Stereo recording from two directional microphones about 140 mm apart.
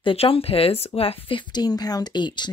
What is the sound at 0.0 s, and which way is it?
Speech, 40° left (ahead or behind).